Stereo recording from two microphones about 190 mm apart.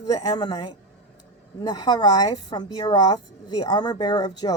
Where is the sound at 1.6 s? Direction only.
25° left (ahead or behind).